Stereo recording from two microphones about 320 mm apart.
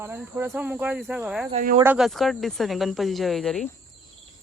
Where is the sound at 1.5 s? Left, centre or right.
Right.